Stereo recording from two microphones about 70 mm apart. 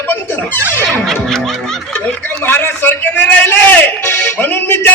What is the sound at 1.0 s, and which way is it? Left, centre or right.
Music, centre.